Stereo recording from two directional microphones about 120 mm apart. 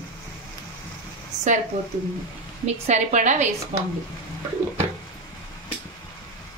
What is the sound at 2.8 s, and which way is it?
Speech, 85° right.